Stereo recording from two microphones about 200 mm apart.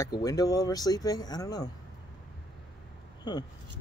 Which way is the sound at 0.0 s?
15° left (ahead or behind).